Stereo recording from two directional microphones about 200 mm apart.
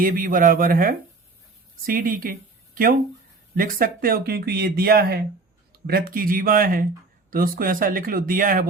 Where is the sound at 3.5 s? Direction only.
45° right (ahead or behind).